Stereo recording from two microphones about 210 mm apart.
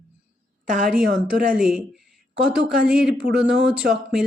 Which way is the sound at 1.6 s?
Centre (ahead or behind).